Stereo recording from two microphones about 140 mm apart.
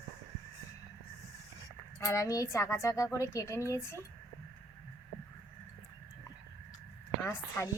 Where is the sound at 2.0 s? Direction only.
20° left (ahead or behind).